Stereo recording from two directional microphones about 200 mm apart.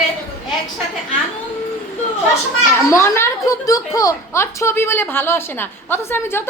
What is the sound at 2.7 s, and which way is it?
A woman's voice, 15° left (ahead or behind).